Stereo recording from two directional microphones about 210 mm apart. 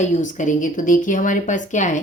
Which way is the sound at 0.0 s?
35° left (ahead or behind).